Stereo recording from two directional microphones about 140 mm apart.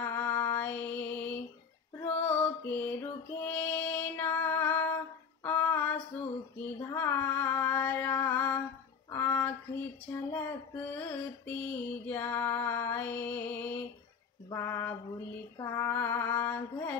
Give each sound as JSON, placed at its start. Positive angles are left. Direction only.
{"t": 0.0, "sound": "music", "side_deg": 15}
{"t": 5.4, "sound": "female singing", "side_deg": 15}
{"t": 9.1, "sound": "a sound", "side_deg": 15}
{"t": 10.3, "sound": "music", "side_deg": 15}
{"t": 14.5, "sound": "a sound", "side_deg": 15}
{"t": 15.6, "sound": "female singing", "side_deg": 20}